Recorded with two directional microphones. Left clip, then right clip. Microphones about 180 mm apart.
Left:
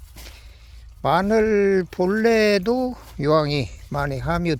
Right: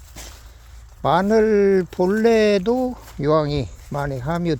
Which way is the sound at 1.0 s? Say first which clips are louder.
Right 2 dB; 5° right (ahead or behind).